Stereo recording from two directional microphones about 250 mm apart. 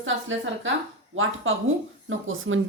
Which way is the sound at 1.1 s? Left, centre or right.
Right.